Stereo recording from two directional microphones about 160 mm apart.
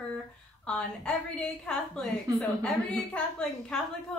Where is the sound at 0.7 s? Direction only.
5° left (ahead or behind).